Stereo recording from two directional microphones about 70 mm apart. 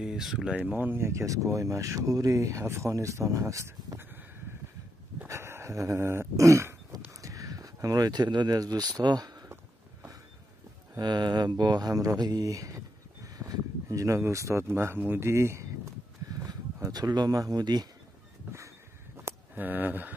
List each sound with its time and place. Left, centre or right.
0.0 s speech: centre
0.6 s speech: right
4.0 s a sound: right
5.3 s a sound: right
11.0 s speech: right
12.4 s speech: right
16.3 s speech: right
19.5 s speech: right